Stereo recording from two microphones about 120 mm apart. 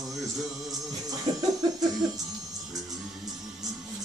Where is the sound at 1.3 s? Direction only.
35° right (ahead or behind).